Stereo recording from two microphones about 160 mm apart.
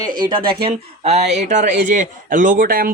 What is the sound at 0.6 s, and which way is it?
Speech, 40° right (ahead or behind).